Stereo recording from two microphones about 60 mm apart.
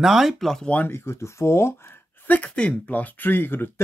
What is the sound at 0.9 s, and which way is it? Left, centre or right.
Speech, left.